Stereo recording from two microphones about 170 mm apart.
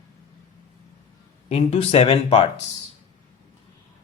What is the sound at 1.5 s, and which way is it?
Speech, 35° left (ahead or behind).